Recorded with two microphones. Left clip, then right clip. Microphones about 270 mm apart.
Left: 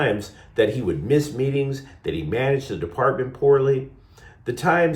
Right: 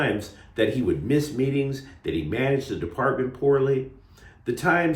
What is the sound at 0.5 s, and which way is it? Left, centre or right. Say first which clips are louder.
Speech: left 3 dB; centre.